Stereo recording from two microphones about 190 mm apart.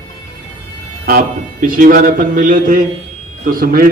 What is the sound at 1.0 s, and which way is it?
A man's voice, 50° right (ahead or behind).